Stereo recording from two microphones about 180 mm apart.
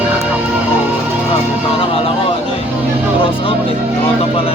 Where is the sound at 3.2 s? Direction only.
30° left (ahead or behind).